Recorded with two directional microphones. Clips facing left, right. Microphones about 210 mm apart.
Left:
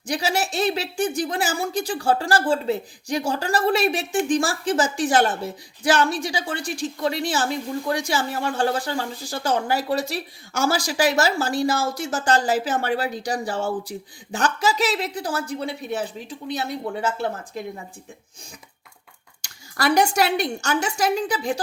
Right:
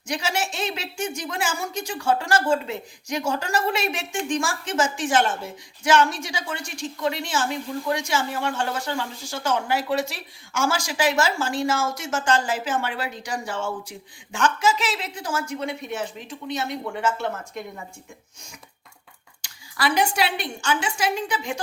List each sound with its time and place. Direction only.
0.1 s speech: 35° left (ahead or behind)
19.4 s speech: 45° left (ahead or behind)